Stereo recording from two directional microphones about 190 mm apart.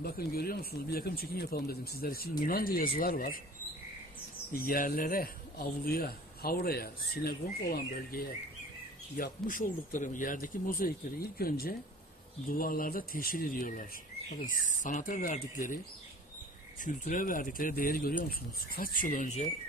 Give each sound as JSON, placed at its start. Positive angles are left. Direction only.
{"t": 0.0, "sound": "speech", "side_deg": 55}
{"t": 4.5, "sound": "speech", "side_deg": 50}
{"t": 16.8, "sound": "speech", "side_deg": 45}